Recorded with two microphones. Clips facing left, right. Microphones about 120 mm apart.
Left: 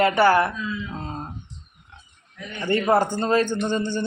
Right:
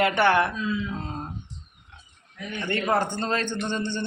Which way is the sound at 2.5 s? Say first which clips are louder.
Left 5 dB; 10° left (ahead or behind).